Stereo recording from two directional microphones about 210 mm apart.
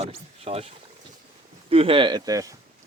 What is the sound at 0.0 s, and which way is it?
Speech, 30° right (ahead or behind).